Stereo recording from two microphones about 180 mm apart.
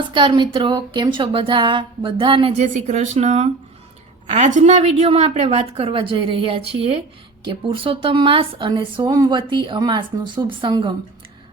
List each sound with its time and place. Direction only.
0.1 s a woman's voice: 25° right (ahead or behind)